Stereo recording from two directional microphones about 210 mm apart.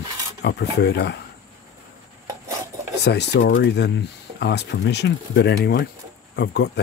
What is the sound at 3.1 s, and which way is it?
Speech, 55° left (ahead or behind).